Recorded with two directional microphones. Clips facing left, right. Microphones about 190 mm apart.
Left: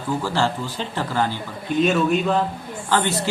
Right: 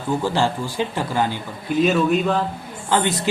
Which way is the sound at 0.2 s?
15° right (ahead or behind).